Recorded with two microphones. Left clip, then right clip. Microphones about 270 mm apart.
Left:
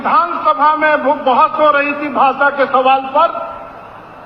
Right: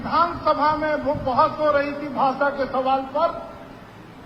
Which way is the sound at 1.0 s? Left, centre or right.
Right.